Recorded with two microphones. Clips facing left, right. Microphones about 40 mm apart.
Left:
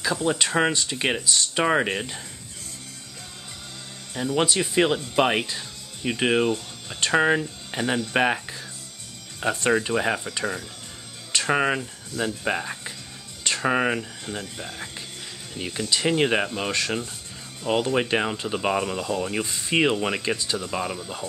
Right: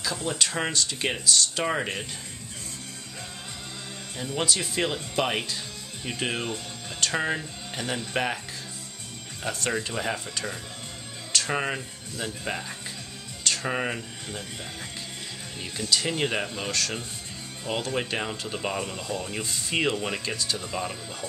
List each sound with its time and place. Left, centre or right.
0.0 s speech: left
4.4 s speech: left
9.4 s speech: left